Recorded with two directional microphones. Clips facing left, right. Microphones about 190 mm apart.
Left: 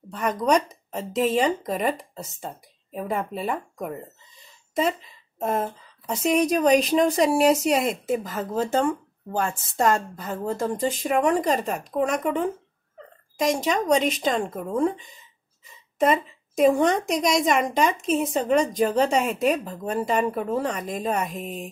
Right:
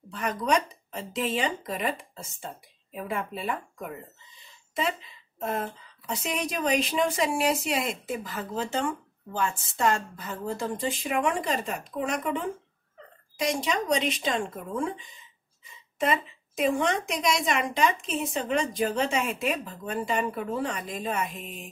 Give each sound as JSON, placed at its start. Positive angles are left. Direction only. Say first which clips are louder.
{"t": 0.1, "sound": "speech", "louder": "left 5 dB", "side_deg": 40}
{"t": 6.2, "sound": "a woman's voice", "louder": "left 10 dB", "side_deg": 40}